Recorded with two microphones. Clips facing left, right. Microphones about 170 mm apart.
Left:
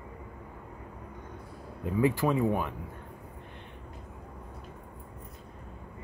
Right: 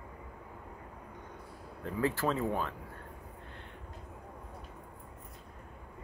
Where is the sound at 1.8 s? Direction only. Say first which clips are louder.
Left 5 dB; 15° left (ahead or behind).